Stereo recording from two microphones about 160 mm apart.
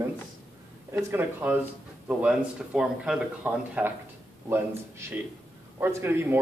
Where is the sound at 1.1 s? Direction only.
10° right (ahead or behind).